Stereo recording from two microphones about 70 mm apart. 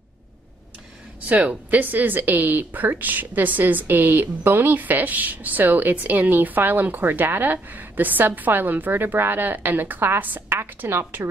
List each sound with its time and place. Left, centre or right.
1.3 s speech: right